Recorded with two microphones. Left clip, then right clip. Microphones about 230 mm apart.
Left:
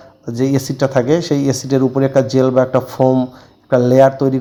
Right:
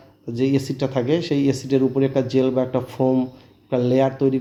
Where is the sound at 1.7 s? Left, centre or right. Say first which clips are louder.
Left 6 dB; left.